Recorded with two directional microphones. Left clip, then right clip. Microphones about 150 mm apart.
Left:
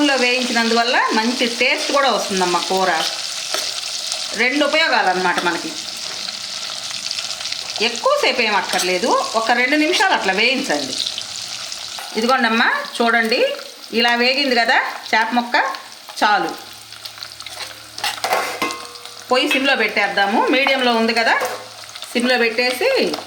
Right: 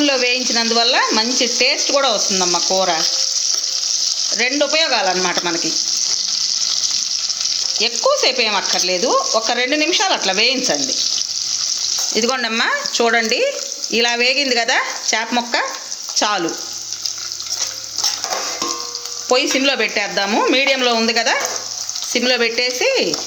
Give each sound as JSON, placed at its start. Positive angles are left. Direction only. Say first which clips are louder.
{"t": 0.0, "sound": "speech", "louder": "even", "side_deg": -80}
{"t": 4.4, "sound": "speech", "louder": "left 2 dB", "side_deg": -70}
{"t": 7.8, "sound": "speech", "louder": "even", "side_deg": -70}
{"t": 12.1, "sound": "speech", "louder": "left 5 dB", "side_deg": -65}
{"t": 16.1, "sound": "frying", "louder": "left 2 dB", "side_deg": -55}
{"t": 19.3, "sound": "speech", "louder": "even", "side_deg": -75}